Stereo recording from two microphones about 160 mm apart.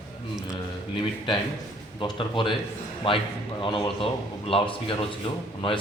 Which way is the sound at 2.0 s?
30° left (ahead or behind).